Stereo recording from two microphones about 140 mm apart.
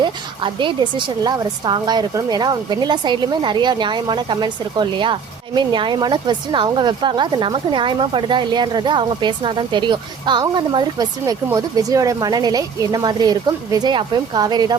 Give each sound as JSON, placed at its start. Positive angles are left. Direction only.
{"t": 0.0, "sound": "speech", "side_deg": -35}